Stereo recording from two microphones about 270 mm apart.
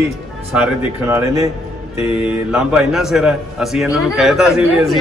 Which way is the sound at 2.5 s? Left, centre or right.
Centre.